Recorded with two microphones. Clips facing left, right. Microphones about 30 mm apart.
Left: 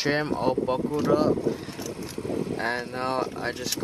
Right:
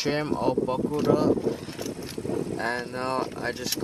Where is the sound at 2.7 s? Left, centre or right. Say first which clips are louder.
Left 1 dB; centre.